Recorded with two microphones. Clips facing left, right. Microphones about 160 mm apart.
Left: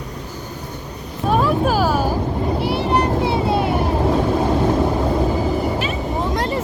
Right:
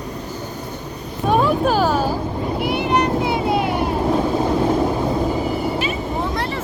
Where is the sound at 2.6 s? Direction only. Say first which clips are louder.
Right 1 dB; 30° left (ahead or behind).